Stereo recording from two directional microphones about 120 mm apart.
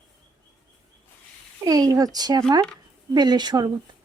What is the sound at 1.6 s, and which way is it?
Speech, 30° right (ahead or behind).